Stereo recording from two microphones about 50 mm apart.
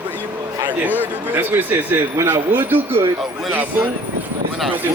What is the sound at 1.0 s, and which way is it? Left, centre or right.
Speech, right.